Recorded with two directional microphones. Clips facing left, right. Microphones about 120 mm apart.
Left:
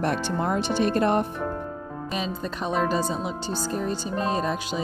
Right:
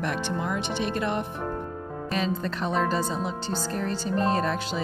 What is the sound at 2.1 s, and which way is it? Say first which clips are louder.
Speech: right 2 dB; 15° left (ahead or behind).